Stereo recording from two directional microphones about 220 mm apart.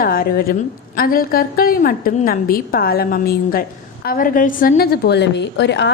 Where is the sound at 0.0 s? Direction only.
40° left (ahead or behind).